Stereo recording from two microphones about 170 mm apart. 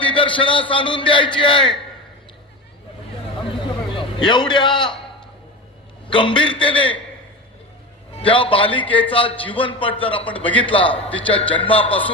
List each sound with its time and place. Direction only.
0.0 s a man's voice: 30° left (ahead or behind)
3.4 s a sound: 30° left (ahead or behind)
6.1 s a man's voice: 30° left (ahead or behind)
8.1 s a man's voice: 30° left (ahead or behind)
10.2 s a man's voice: 10° left (ahead or behind)
10.5 s a man's voice: 30° left (ahead or behind)